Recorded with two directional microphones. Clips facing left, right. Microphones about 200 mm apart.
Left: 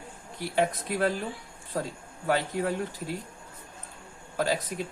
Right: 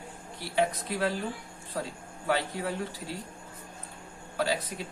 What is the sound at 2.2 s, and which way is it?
Speech, 45° left (ahead or behind).